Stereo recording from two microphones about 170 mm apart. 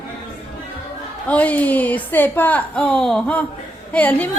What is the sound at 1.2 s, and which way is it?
A woman's voice, 10° left (ahead or behind).